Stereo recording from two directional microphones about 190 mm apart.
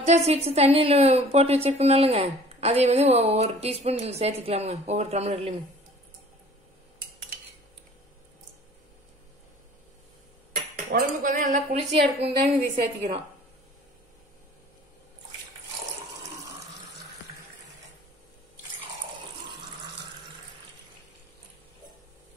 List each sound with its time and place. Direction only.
0.0 s a woman's voice: 35° right (ahead or behind)
10.9 s cutlery: 45° right (ahead or behind)
12.2 s a woman's voice: 35° right (ahead or behind)